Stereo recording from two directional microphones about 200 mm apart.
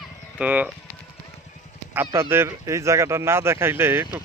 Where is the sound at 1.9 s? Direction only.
10° right (ahead or behind).